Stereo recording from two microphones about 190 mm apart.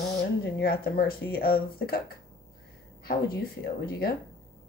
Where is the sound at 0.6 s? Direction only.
55° left (ahead or behind).